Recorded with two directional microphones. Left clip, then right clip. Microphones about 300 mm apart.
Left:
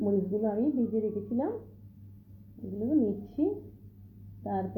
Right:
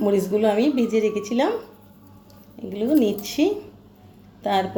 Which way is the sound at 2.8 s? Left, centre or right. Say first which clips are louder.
Right 9 dB; right.